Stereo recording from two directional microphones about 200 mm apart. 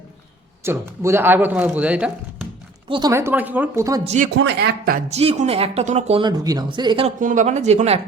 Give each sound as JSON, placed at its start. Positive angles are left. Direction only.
{"t": 0.6, "sound": "speech", "side_deg": -10}
{"t": 2.9, "sound": "speech", "side_deg": -15}
{"t": 4.0, "sound": "speech", "side_deg": -35}
{"t": 4.4, "sound": "speech", "side_deg": -60}
{"t": 5.0, "sound": "speech", "side_deg": -30}
{"t": 7.2, "sound": "speech", "side_deg": -40}